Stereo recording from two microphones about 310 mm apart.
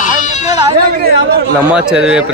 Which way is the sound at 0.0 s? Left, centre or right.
Left.